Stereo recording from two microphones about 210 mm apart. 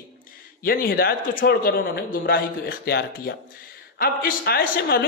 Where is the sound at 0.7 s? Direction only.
45° left (ahead or behind).